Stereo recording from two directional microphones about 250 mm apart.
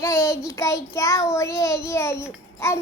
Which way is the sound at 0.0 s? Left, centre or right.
Centre.